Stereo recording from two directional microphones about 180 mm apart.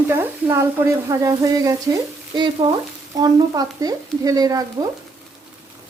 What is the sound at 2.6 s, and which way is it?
Stir, 25° right (ahead or behind).